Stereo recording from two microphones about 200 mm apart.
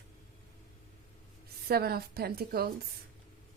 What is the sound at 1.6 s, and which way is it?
A woman's voice, 50° right (ahead or behind).